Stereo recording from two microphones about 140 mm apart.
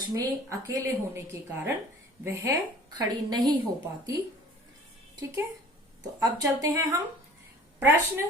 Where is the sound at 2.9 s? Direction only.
30° right (ahead or behind).